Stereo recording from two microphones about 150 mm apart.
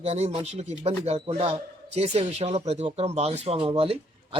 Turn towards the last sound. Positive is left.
turn(degrees=-40)  # may be behind; listen again after turning